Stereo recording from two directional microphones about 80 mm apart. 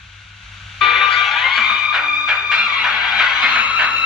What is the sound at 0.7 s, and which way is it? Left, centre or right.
Music, centre.